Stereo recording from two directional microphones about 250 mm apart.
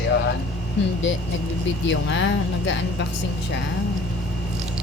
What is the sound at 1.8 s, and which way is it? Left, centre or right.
Speech, left.